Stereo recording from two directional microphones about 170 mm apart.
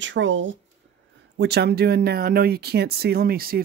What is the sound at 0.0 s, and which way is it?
Speech, 90° right.